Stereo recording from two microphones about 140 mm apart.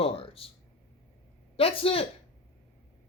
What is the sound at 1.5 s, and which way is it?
Speech, 40° left (ahead or behind).